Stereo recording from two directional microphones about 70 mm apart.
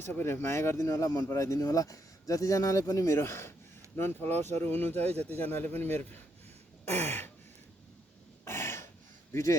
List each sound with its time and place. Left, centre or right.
0.0 s speech: left
8.4 s a sound: left
9.3 s speech: left